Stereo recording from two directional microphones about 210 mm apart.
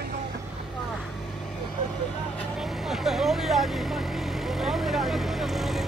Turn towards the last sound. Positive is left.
turn(degrees=0)  # may be behind; listen again after turning